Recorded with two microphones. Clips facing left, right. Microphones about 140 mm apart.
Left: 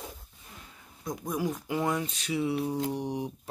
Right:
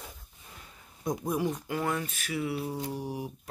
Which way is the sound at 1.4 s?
Centre (ahead or behind).